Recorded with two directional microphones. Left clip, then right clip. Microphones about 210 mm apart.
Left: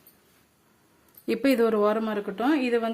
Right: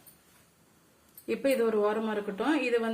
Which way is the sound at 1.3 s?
55° left (ahead or behind).